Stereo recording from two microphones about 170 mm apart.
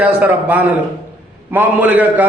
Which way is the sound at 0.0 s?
10° right (ahead or behind).